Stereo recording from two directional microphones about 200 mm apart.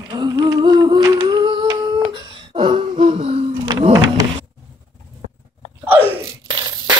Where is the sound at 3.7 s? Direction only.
20° right (ahead or behind).